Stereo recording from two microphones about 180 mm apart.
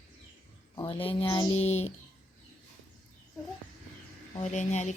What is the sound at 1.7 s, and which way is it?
Speech, 35° left (ahead or behind).